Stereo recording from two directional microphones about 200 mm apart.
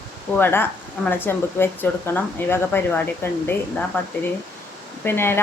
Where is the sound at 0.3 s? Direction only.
10° left (ahead or behind).